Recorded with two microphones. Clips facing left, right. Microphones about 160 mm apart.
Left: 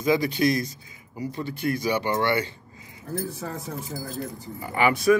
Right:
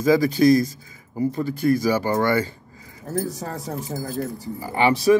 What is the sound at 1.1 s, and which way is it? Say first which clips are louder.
Speech: right 8 dB; 45° right (ahead or behind).